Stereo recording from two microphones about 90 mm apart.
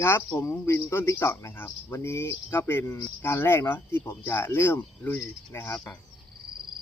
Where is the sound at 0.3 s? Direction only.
30° left (ahead or behind).